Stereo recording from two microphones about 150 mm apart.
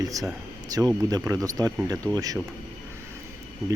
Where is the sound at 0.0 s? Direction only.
25° right (ahead or behind).